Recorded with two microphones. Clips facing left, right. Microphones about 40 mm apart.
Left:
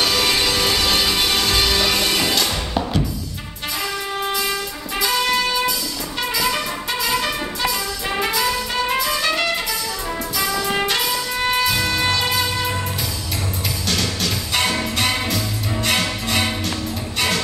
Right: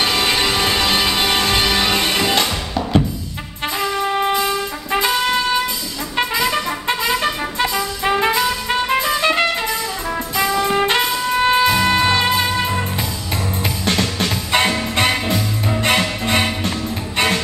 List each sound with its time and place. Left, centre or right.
0.0 s music: right
4.9 s music: right
13.8 s music: right